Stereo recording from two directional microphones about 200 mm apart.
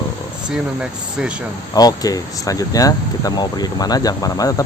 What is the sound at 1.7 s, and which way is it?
Speech, 20° left (ahead or behind).